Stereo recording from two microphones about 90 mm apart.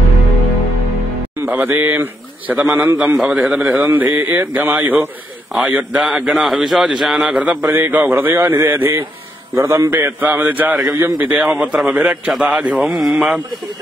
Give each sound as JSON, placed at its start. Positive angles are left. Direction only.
{"t": 1.4, "sound": "a man's voice", "side_deg": -20}
{"t": 3.2, "sound": "a man's voice", "side_deg": -15}
{"t": 6.0, "sound": "a man's voice", "side_deg": -5}
{"t": 7.2, "sound": "a man's voice", "side_deg": -15}
{"t": 12.3, "sound": "a man's voice", "side_deg": 0}
{"t": 12.5, "sound": "a man's voice", "side_deg": -10}